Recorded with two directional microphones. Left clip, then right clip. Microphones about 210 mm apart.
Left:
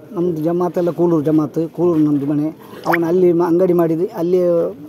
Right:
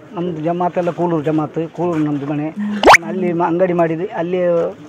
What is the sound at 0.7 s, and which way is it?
Speech, 55° left (ahead or behind).